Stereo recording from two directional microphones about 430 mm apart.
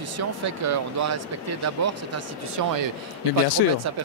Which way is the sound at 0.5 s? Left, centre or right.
Right.